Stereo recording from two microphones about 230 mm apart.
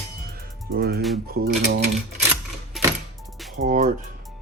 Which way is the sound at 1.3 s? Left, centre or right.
Right.